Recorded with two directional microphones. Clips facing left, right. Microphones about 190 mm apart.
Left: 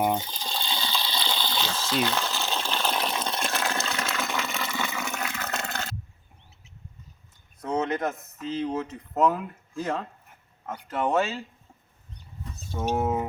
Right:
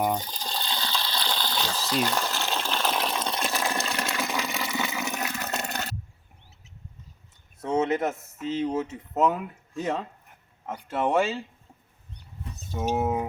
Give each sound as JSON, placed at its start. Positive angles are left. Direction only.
{"t": 0.0, "sound": "speech", "side_deg": 5}
{"t": 0.3, "sound": "water", "side_deg": -5}
{"t": 7.6, "sound": "a sound", "side_deg": -25}
{"t": 7.9, "sound": "speech", "side_deg": -5}
{"t": 12.7, "sound": "speech", "side_deg": -5}